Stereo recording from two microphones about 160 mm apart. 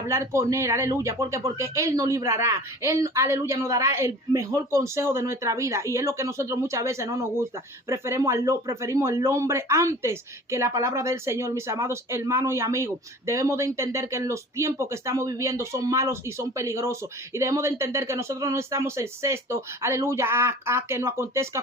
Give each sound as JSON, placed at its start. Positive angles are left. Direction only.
{"t": 0.1, "sound": "speech", "side_deg": -15}